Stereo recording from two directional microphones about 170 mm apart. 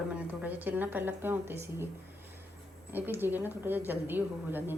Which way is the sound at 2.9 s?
10° right (ahead or behind).